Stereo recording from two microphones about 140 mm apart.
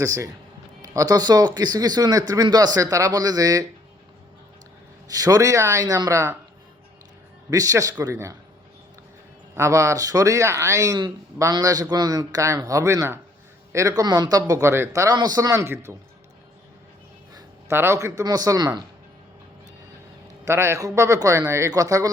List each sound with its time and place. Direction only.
0.0 s speech: 25° right (ahead or behind)
5.0 s speech: 25° right (ahead or behind)
7.5 s speech: 25° right (ahead or behind)
9.6 s speech: 20° right (ahead or behind)
17.3 s speech: 20° right (ahead or behind)
20.4 s speech: 20° right (ahead or behind)